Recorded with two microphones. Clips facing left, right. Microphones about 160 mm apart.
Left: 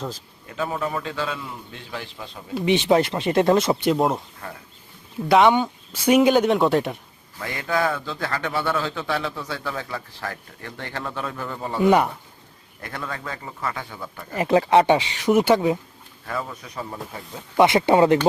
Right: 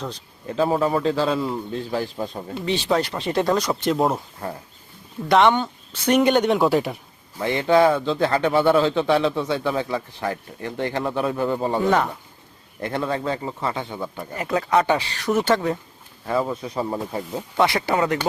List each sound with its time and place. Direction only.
0.4 s a man's voice: 35° right (ahead or behind)
2.6 s speech: 20° left (ahead or behind)
3.9 s speech: centre (ahead or behind)
4.4 s a man's voice: 30° right (ahead or behind)
5.3 s speech: 5° left (ahead or behind)
7.3 s a man's voice: 25° right (ahead or behind)
12.8 s a man's voice: 25° right (ahead or behind)
14.3 s speech: 25° left (ahead or behind); by 15.8 s 10° left (ahead or behind)
16.2 s a man's voice: 25° right (ahead or behind)
16.9 s a man's voice: 40° right (ahead or behind)
17.6 s speech: 20° left (ahead or behind)